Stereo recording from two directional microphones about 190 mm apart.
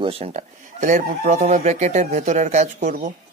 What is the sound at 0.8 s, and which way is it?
Speech, 45° right (ahead or behind).